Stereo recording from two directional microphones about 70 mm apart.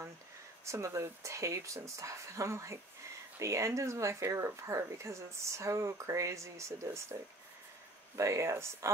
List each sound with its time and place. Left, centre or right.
0.7 s speech: right
8.2 s speech: right